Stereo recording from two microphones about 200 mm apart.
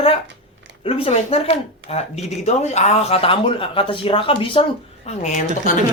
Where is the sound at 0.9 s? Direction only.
30° left (ahead or behind).